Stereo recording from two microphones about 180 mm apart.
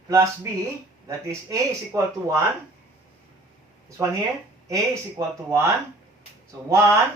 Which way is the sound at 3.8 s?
20° right (ahead or behind).